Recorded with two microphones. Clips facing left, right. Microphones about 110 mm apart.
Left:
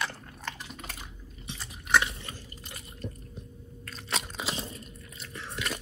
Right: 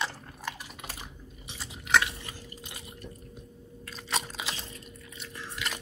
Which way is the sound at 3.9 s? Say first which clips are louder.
Right 1 dB; centre (ahead or behind).